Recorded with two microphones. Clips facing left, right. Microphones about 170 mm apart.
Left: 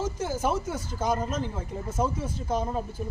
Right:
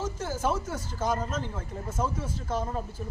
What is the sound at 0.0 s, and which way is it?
Speech, 10° left (ahead or behind).